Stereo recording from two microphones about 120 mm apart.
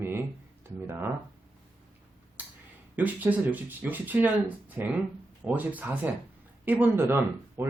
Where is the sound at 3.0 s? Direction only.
15° right (ahead or behind).